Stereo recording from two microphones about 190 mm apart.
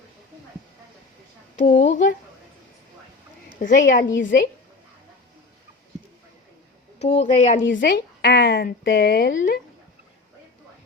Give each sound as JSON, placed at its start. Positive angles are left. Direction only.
{"t": 1.6, "sound": "speech", "side_deg": 40}
{"t": 3.6, "sound": "a woman's voice", "side_deg": 45}
{"t": 7.2, "sound": "speech", "side_deg": 40}
{"t": 7.7, "sound": "speech", "side_deg": 70}
{"t": 9.3, "sound": "a woman's voice", "side_deg": 45}